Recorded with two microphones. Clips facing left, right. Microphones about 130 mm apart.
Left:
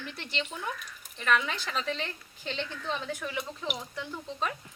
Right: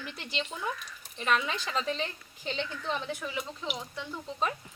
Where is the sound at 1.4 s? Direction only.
5° right (ahead or behind).